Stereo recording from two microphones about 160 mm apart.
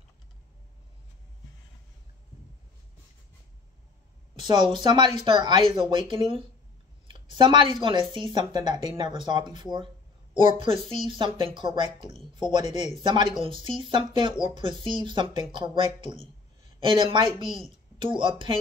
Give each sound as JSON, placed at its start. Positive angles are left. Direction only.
{"t": 4.5, "sound": "speech", "side_deg": -30}
{"t": 7.1, "sound": "a sound", "side_deg": -30}
{"t": 8.1, "sound": "speech", "side_deg": -30}
{"t": 12.6, "sound": "speech", "side_deg": 45}
{"t": 13.0, "sound": "speech", "side_deg": -30}